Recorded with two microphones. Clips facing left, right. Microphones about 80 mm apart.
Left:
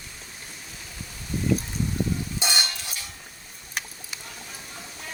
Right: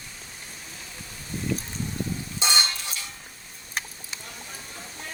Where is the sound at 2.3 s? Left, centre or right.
Right.